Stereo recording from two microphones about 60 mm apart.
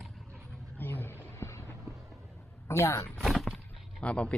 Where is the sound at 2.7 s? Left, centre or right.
Left.